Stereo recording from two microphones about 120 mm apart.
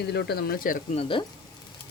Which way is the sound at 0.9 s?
50° left (ahead or behind).